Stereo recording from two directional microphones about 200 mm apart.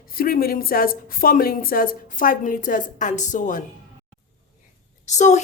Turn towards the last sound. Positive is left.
turn(degrees=35)  # may be behind; listen again after turning